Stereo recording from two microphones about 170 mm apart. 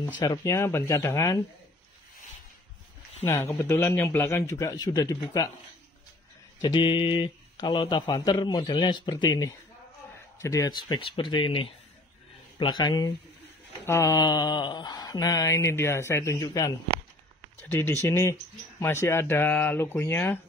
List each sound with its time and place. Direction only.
0.2 s speech: 20° left (ahead or behind)
3.3 s speech: 15° left (ahead or behind)
6.6 s speech: 25° left (ahead or behind)